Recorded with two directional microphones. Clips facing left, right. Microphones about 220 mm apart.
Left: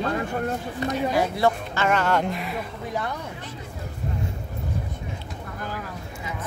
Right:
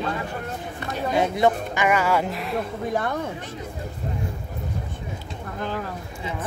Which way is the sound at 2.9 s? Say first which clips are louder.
Right 4 dB; 50° right (ahead or behind).